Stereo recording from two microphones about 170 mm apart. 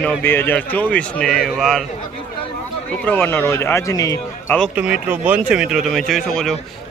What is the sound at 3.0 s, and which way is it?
Speech, 10° left (ahead or behind).